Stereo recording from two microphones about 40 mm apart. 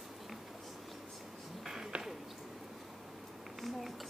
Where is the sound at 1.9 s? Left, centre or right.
Right.